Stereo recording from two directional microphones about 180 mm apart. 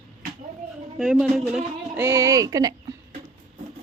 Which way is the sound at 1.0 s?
Centre (ahead or behind).